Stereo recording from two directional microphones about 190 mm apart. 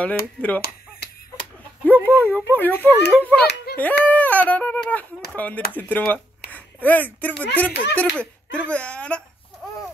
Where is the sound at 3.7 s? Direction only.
55° left (ahead or behind).